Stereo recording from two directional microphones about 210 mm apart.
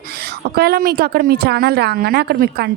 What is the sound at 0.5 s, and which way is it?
A woman's voice, 45° right (ahead or behind).